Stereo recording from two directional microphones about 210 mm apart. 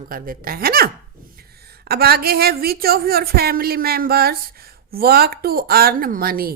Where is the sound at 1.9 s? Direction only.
45° right (ahead or behind).